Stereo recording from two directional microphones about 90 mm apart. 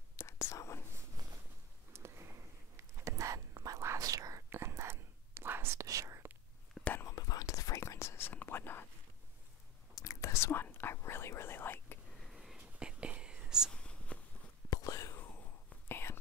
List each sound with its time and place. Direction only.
0.1 s whispering: 35° left (ahead or behind)
1.2 s a sound: 45° right (ahead or behind)
1.9 s a sound: 30° right (ahead or behind)
3.0 s whispering: 35° right (ahead or behind)
6.8 s whispering: 20° left (ahead or behind)
7.1 s whispering: 45° left (ahead or behind)
8.3 s whispering: 20° left (ahead or behind)
9.9 s whispering: 40° left (ahead or behind)
12.2 s whispering: centre (ahead or behind)
13.7 s whispering: 10° left (ahead or behind)
14.7 s whispering: 40° left (ahead or behind)
15.1 s whispering: 20° left (ahead or behind)